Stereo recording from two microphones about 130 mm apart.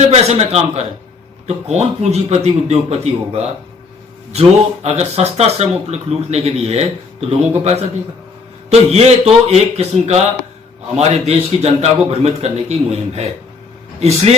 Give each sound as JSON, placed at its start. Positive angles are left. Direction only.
{"t": 0.1, "sound": "a man's voice", "side_deg": -55}